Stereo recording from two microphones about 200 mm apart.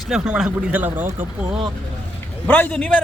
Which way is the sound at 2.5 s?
10° left (ahead or behind).